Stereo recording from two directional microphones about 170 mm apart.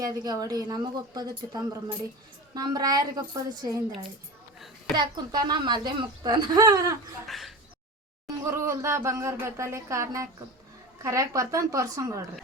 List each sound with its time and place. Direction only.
0.0 s speech: 20° right (ahead or behind)
4.9 s speech: 25° right (ahead or behind)
7.3 s speech: centre (ahead or behind)
8.4 s speech: 15° right (ahead or behind)